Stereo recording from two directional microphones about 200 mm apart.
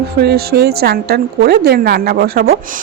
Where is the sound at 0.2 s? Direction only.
55° right (ahead or behind).